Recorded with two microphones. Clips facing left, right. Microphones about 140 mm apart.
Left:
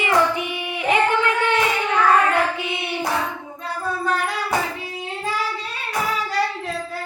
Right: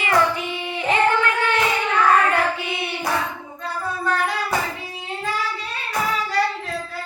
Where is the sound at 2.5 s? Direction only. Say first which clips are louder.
Left 1 dB; 20° left (ahead or behind).